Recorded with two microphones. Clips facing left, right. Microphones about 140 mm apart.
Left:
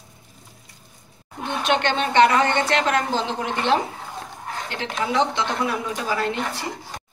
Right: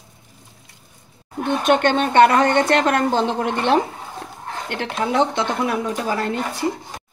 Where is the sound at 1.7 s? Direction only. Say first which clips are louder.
Right 4 dB; 50° right (ahead or behind).